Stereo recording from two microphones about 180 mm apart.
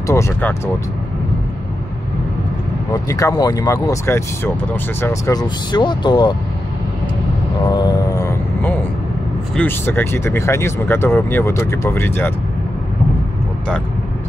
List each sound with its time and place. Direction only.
0.0 s speech: 15° left (ahead or behind)
2.9 s speech: 15° left (ahead or behind)
7.7 s vehicle: 20° left (ahead or behind)
9.6 s speech: 10° left (ahead or behind)